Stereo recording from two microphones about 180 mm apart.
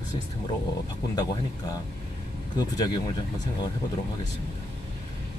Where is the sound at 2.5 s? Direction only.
25° left (ahead or behind).